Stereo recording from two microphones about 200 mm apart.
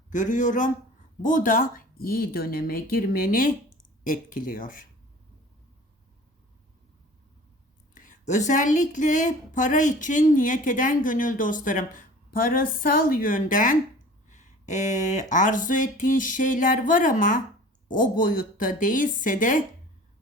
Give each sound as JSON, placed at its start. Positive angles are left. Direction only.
{"t": 0.1, "sound": "speech", "side_deg": 40}
{"t": 7.9, "sound": "speech", "side_deg": 40}